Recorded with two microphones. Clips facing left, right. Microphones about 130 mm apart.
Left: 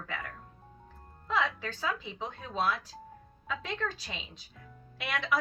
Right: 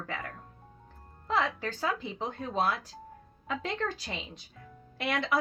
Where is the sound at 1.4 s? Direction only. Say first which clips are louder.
Right 1 dB; 55° right (ahead or behind).